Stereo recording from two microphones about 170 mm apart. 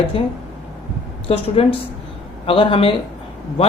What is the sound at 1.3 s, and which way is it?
Speech, 35° left (ahead or behind).